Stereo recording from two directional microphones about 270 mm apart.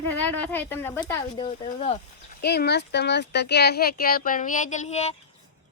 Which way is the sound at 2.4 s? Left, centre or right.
Left.